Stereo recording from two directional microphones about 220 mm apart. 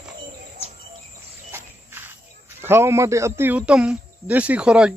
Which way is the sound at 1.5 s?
10° right (ahead or behind).